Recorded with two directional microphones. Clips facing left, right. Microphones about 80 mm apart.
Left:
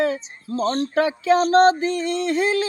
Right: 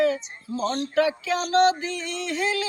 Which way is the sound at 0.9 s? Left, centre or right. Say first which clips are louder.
Left 5 dB; left.